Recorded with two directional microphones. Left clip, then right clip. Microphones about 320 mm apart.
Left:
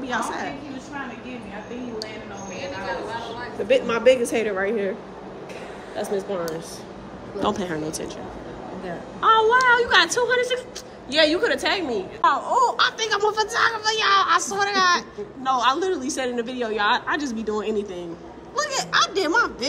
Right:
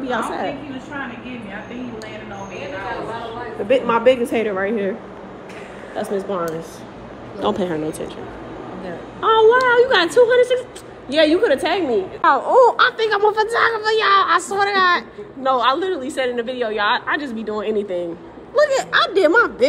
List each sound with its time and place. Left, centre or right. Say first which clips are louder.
0.0 s a woman's voice: right 4 dB; centre
3.6 s a woman's voice: right 3 dB; centre
7.4 s a woman's voice: right 5 dB; centre
9.2 s a woman's voice: right 3 dB; centre